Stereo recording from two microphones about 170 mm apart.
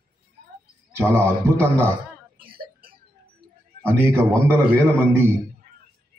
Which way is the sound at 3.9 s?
15° right (ahead or behind).